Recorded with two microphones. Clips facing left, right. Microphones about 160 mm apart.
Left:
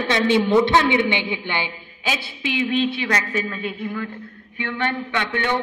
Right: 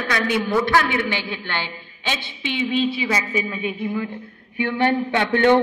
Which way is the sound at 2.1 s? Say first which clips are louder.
Left 2 dB; 5° left (ahead or behind).